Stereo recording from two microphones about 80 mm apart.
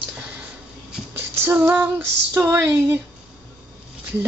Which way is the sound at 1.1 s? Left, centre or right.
Right.